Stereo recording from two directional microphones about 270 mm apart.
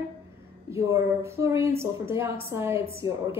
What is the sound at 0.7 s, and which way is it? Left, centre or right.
Speech, centre.